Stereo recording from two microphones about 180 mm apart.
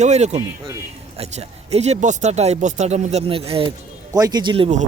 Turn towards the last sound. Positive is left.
turn(degrees=-35)  # may be behind; listen again after turning